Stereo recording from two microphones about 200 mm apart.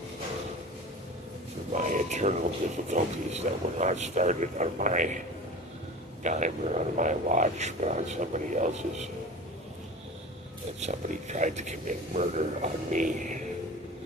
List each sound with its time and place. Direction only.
1.7 s speech: 35° right (ahead or behind)
6.2 s speech: 35° right (ahead or behind)
10.8 s speech: 35° right (ahead or behind)